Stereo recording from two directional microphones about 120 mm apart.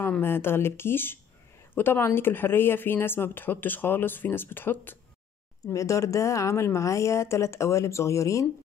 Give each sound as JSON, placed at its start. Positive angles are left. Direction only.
{"t": 0.0, "sound": "speech", "side_deg": 20}